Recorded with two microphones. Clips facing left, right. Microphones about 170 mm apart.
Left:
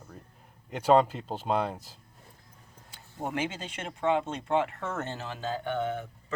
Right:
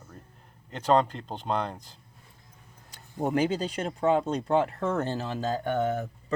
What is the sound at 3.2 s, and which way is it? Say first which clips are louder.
Speech: right 7 dB; 35° right (ahead or behind).